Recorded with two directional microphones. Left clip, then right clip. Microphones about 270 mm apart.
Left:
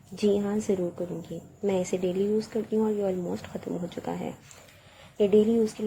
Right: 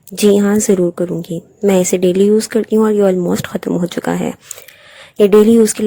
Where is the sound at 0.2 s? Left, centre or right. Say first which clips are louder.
Right 14 dB; right.